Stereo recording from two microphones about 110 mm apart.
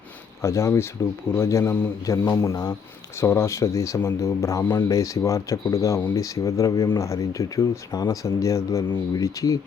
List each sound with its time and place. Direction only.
0.4 s speech: 25° left (ahead or behind)